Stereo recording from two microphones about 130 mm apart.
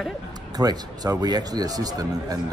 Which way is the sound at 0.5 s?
30° right (ahead or behind).